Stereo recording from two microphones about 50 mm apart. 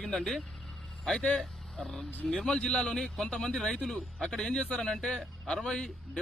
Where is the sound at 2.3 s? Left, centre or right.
Centre.